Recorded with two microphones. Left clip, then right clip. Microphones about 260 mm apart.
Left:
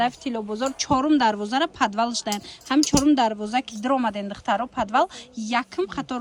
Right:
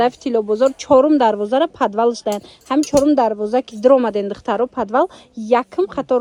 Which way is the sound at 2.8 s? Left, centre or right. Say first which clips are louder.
Right 6 dB; left.